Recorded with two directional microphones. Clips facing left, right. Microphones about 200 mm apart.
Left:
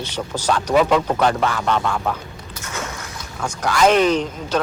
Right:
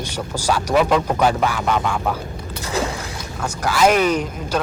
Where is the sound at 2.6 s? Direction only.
35° right (ahead or behind).